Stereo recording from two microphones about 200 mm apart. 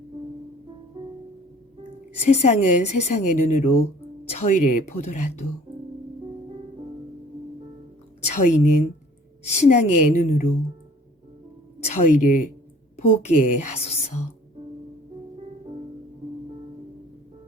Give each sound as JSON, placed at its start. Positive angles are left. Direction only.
{"t": 2.2, "sound": "a woman's voice", "side_deg": 35}
{"t": 8.3, "sound": "a woman's voice", "side_deg": 40}
{"t": 12.0, "sound": "a woman's voice", "side_deg": 40}